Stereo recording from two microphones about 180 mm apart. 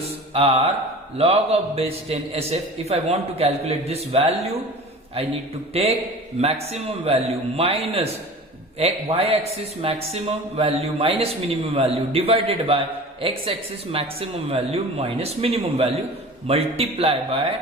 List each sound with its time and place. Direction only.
0.3 s speech: 30° right (ahead or behind)
5.7 s speech: 35° right (ahead or behind)